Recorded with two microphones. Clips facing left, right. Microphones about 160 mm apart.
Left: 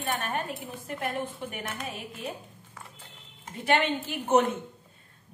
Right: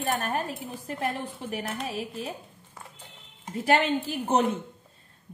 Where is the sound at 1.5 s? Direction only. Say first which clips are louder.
Right 5 dB; 35° right (ahead or behind).